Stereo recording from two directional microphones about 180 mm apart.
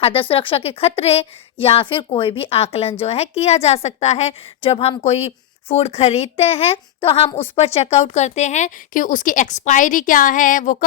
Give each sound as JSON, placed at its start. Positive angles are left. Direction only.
{"t": 0.0, "sound": "a woman's voice", "side_deg": 30}